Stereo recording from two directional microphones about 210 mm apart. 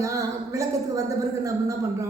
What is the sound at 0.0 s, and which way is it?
Speech, 15° right (ahead or behind).